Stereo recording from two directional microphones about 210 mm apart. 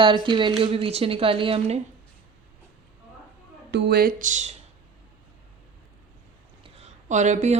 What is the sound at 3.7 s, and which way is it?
Speech, 55° right (ahead or behind).